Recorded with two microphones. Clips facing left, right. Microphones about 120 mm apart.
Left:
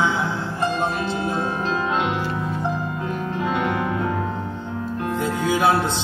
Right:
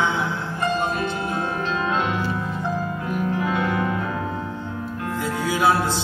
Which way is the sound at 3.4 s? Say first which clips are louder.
Left 1 dB; 25° left (ahead or behind).